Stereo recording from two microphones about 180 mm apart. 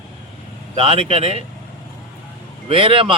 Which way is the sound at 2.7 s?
30° right (ahead or behind).